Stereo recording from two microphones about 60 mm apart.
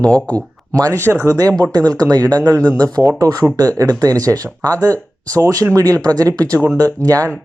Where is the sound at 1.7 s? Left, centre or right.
Right.